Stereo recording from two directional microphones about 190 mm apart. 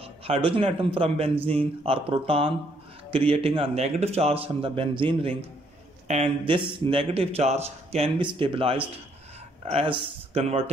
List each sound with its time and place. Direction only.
0.0 s a man's voice: 30° right (ahead or behind)